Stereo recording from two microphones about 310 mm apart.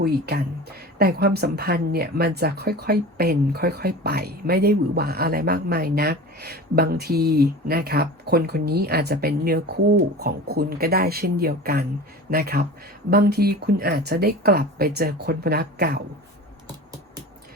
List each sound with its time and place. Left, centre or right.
0.0 s a woman's voice: right